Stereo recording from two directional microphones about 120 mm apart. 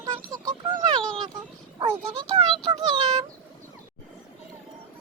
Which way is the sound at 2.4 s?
40° right (ahead or behind).